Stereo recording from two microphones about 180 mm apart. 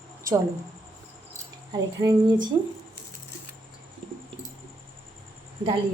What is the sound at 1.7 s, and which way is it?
Speech, 20° right (ahead or behind).